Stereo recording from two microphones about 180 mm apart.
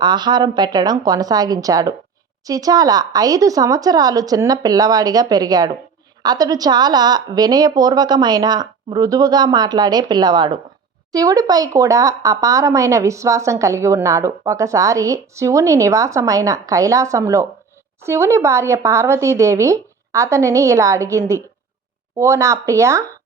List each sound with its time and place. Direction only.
0.0 s a woman's voice: 25° right (ahead or behind)